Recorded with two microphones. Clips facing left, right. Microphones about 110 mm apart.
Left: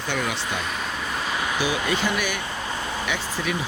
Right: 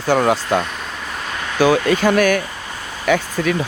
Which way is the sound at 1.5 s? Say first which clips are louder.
Right 13 dB; 50° right (ahead or behind).